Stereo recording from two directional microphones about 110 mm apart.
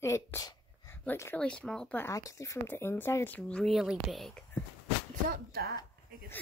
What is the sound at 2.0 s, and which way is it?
Speech, 30° left (ahead or behind).